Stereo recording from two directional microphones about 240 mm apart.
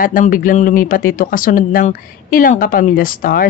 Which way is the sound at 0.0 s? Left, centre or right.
Left.